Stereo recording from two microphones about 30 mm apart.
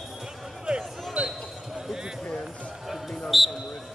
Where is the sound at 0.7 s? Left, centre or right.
Right.